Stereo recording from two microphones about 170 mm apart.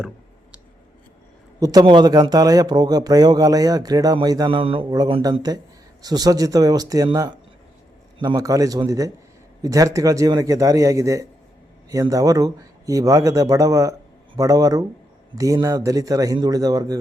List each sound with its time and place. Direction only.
1.5 s a man's voice: 20° right (ahead or behind)